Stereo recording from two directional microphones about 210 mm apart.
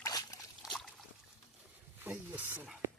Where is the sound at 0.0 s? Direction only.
15° left (ahead or behind).